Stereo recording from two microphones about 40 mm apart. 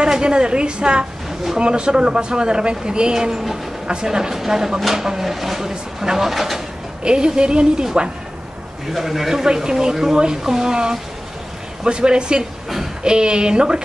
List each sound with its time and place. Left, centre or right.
0.0 s speech: right; by 6.6 s centre
7.0 s speech: right
8.9 s speech: centre; by 13.8 s right